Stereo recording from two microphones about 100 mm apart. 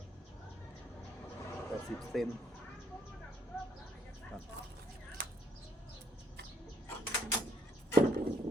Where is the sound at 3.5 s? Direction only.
20° left (ahead or behind).